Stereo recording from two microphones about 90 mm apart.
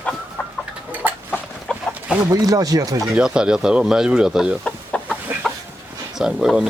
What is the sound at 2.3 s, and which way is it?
Speech, 40° right (ahead or behind).